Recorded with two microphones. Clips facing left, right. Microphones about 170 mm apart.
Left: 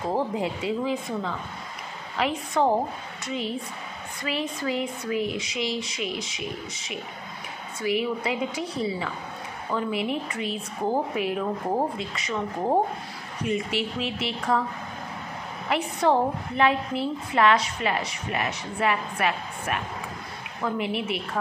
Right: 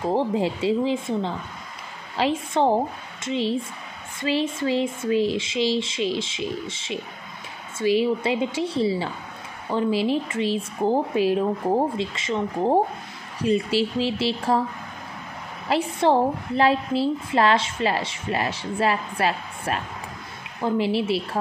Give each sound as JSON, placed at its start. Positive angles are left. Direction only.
{"t": 0.1, "sound": "a woman's voice", "side_deg": -30}
{"t": 2.1, "sound": "a woman's voice", "side_deg": -30}
{"t": 15.7, "sound": "a woman's voice", "side_deg": -30}